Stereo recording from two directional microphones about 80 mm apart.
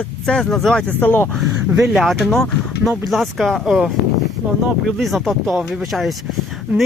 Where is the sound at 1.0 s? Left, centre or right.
Left.